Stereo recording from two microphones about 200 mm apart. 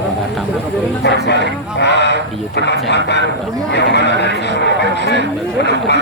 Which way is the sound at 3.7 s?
60° left (ahead or behind).